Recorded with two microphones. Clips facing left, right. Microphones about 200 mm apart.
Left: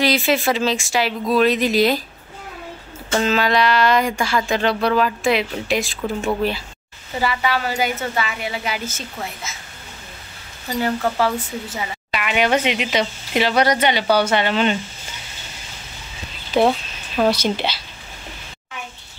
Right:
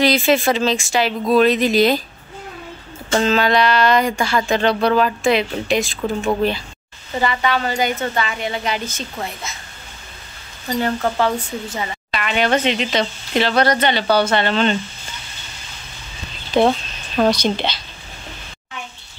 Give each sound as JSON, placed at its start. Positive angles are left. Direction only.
{"t": 0.0, "sound": "speech", "side_deg": 5}
{"t": 3.2, "sound": "speech", "side_deg": 5}
{"t": 7.2, "sound": "speech", "side_deg": 5}
{"t": 10.8, "sound": "speech", "side_deg": 5}
{"t": 16.5, "sound": "a woman's voice", "side_deg": 5}